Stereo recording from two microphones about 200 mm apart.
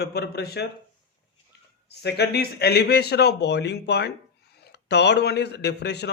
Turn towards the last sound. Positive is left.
turn(degrees=55)  # may be behind; listen again after turning